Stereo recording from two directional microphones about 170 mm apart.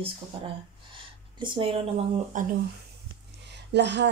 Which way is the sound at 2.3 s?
50° right (ahead or behind).